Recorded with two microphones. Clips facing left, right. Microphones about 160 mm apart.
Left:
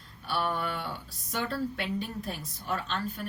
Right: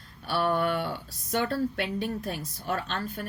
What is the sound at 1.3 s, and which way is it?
A woman's voice, 50° right (ahead or behind).